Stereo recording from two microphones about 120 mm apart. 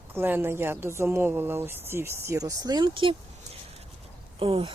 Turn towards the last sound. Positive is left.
turn(degrees=-50)  # may be behind; listen again after turning